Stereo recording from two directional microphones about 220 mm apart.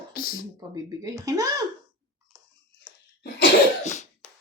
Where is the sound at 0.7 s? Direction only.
15° right (ahead or behind).